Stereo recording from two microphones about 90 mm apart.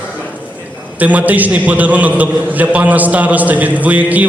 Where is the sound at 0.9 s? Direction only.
15° right (ahead or behind).